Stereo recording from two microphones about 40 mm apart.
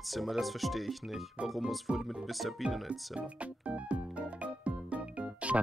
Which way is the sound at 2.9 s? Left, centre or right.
Right.